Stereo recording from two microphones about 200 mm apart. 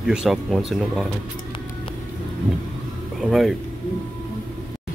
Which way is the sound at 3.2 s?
Centre (ahead or behind).